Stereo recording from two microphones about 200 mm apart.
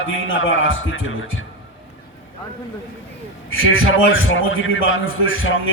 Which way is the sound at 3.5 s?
90° left.